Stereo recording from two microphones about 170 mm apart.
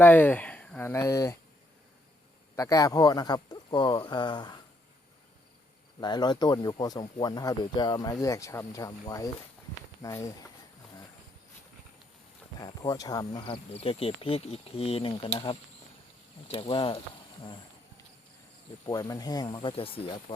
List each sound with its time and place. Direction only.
0.0 s speech: 10° left (ahead or behind)
2.6 s speech: 20° left (ahead or behind)
6.0 s speech: 25° left (ahead or behind)
12.5 s speech: 25° left (ahead or behind)
18.9 s speech: 20° left (ahead or behind)